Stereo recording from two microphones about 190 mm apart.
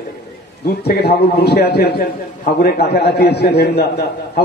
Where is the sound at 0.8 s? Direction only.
60° left (ahead or behind).